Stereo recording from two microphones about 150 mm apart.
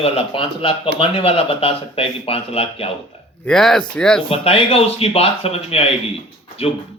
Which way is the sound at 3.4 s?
5° left (ahead or behind).